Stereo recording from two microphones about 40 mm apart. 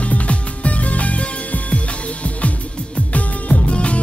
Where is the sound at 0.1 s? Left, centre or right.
Left.